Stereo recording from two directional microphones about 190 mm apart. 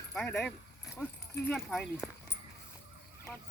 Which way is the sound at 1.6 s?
Centre (ahead or behind).